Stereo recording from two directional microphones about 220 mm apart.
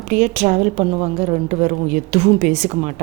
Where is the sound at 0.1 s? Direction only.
35° right (ahead or behind).